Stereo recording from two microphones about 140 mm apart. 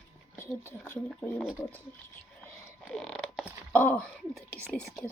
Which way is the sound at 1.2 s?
15° left (ahead or behind).